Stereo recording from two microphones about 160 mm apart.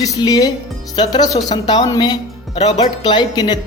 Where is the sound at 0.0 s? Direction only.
25° left (ahead or behind).